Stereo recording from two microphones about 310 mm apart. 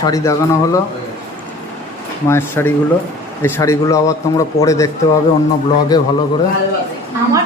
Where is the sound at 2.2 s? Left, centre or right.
Centre.